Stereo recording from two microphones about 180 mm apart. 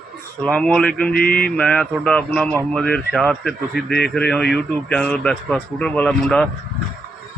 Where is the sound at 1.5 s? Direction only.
5° left (ahead or behind).